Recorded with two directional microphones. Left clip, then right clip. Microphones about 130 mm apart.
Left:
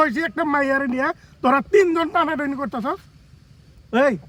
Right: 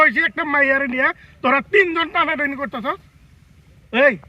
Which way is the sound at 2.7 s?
35° left (ahead or behind).